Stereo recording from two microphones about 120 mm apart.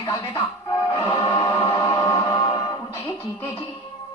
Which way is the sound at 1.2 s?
40° left (ahead or behind).